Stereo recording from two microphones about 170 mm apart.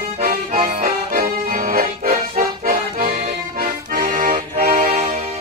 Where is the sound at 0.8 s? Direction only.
60° right (ahead or behind); by 5.1 s 40° right (ahead or behind).